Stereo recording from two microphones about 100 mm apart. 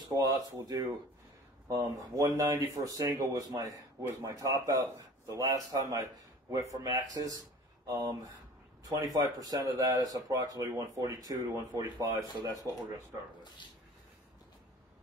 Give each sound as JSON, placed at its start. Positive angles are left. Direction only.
{"t": 0.0, "sound": "speech", "side_deg": -35}